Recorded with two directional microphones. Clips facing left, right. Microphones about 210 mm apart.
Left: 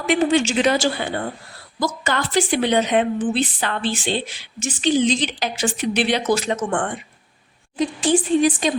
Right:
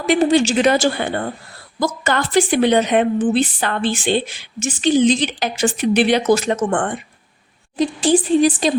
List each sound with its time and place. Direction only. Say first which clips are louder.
0.0 s a woman's voice: right 3 dB; 35° right (ahead or behind)
0.6 s a woman's voice: right 3 dB; 50° right (ahead or behind)
7.8 s a woman's voice: right 3 dB; 35° right (ahead or behind)